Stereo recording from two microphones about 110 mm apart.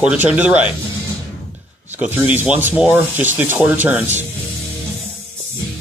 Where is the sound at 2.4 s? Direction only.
15° right (ahead or behind).